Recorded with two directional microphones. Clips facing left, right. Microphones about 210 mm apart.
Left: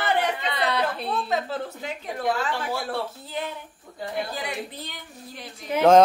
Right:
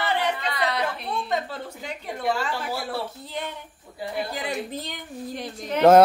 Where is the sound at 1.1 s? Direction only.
Centre (ahead or behind).